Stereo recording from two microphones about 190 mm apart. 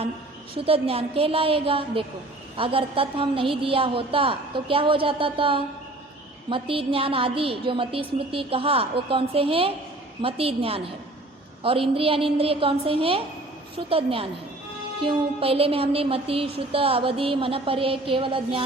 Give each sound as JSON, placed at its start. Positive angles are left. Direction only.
{"t": 0.5, "sound": "a woman's voice", "side_deg": -30}